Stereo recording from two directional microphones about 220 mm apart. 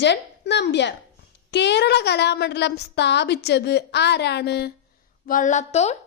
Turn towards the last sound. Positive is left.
turn(degrees=30)  # may be behind; listen again after turning